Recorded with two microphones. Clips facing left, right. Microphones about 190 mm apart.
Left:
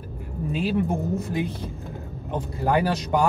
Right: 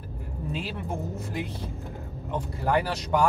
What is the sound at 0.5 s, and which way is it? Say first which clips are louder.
Speech: left 8 dB; 15° left (ahead or behind).